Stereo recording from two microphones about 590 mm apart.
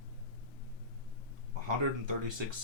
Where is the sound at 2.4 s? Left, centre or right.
Right.